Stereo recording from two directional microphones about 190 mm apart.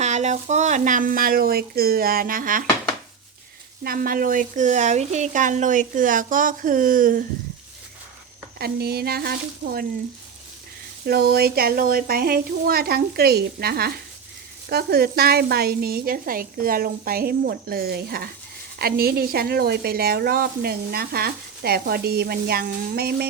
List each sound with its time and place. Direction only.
0.0 s a woman's voice: 40° right (ahead or behind)
3.8 s a woman's voice: 50° right (ahead or behind)
8.5 s speech: 55° right (ahead or behind)
11.0 s a woman's voice: 55° right (ahead or behind)